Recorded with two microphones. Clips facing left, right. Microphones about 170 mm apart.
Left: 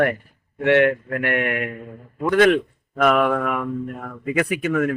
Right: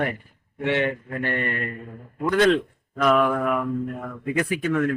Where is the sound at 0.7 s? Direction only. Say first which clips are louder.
Left 7 dB; 65° left (ahead or behind).